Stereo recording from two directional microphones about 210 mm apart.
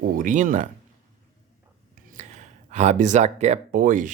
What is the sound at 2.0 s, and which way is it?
Speech, 40° right (ahead or behind).